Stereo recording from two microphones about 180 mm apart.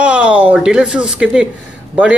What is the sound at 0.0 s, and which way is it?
Speech, 5° right (ahead or behind).